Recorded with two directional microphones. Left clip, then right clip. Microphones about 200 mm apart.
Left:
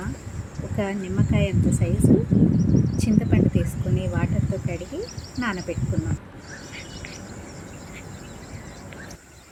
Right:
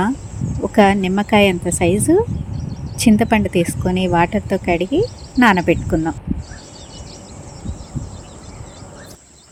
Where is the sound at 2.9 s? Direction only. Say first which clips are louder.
Right 9 dB; 45° right (ahead or behind).